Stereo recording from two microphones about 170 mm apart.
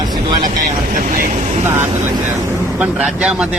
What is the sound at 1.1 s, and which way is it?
Speech, 50° right (ahead or behind).